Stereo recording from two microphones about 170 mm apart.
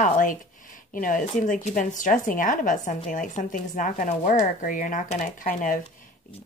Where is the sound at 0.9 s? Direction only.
50° left (ahead or behind).